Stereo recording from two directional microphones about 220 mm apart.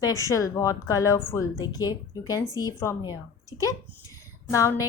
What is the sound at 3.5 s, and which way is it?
Speech, 60° left (ahead or behind).